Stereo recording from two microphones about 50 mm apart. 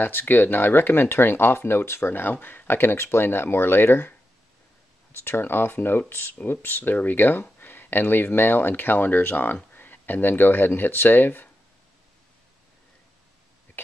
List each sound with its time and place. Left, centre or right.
0.0 s speech: left
5.1 s speech: left